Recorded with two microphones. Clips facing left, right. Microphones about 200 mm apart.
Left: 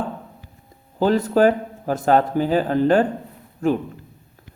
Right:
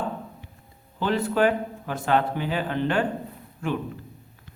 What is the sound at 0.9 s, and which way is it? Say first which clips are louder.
A man's voice: left 6 dB; 40° left (ahead or behind).